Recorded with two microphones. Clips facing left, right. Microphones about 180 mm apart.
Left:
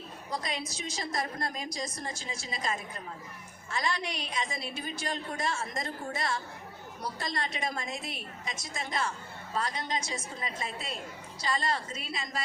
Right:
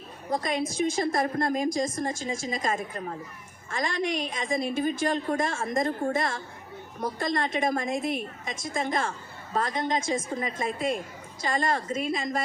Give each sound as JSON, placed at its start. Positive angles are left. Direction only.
{"t": 0.3, "sound": "a woman's voice", "side_deg": -50}